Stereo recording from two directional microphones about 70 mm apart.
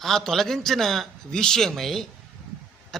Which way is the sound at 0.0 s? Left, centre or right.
Centre.